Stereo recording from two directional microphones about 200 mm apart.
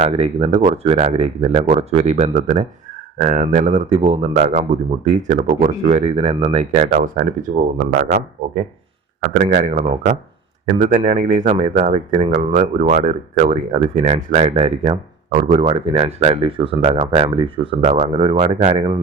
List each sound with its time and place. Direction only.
0.0 s speech: 30° right (ahead or behind); by 8.2 s 45° right (ahead or behind)
9.4 s speech: 40° right (ahead or behind)